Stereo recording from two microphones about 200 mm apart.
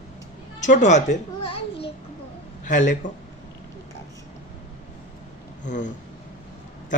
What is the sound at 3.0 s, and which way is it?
Speech, 40° left (ahead or behind).